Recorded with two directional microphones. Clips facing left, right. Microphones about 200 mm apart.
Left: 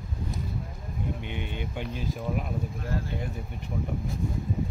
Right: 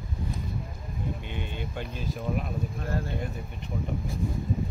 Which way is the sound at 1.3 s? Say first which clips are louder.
Left 1 dB; 15° left (ahead or behind).